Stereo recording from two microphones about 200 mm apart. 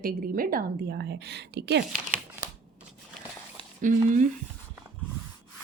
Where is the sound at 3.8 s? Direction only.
40° right (ahead or behind).